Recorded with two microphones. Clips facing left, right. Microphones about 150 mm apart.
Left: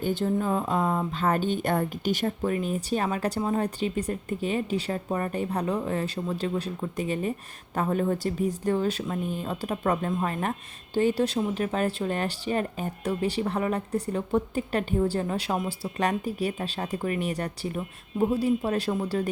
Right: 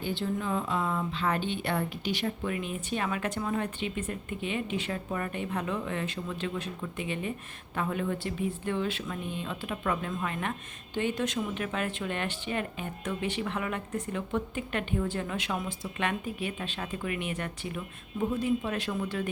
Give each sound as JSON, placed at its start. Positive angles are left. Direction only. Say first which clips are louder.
{"t": 0.0, "sound": "speech", "louder": "left 6 dB", "side_deg": 45}